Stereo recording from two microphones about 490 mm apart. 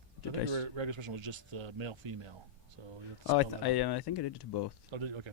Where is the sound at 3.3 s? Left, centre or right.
Left.